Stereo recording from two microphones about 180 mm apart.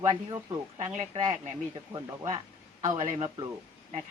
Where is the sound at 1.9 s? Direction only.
20° right (ahead or behind).